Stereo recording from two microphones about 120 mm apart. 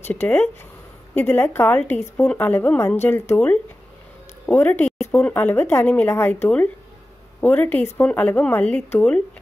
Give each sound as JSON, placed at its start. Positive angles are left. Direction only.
{"t": 0.0, "sound": "a woman's voice", "side_deg": 15}